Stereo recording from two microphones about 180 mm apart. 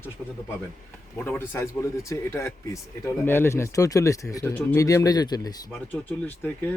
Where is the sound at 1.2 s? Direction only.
10° left (ahead or behind).